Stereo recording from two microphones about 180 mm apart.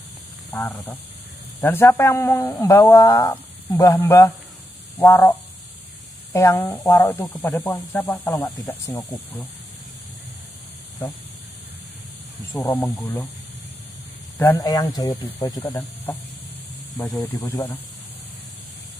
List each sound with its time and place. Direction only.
0.5 s speech: 15° left (ahead or behind)
4.9 s frog: 10° left (ahead or behind)
6.3 s speech: 15° left (ahead or behind)
8.6 s speech: 10° left (ahead or behind)
12.5 s speech: 10° left (ahead or behind)
14.4 s speech: 20° left (ahead or behind)
16.9 s speech: 20° left (ahead or behind)